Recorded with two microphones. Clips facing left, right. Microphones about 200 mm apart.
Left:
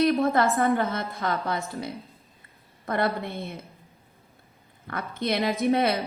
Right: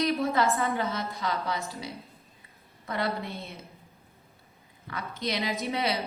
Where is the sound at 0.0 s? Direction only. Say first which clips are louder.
Left 4 dB; 55° left (ahead or behind).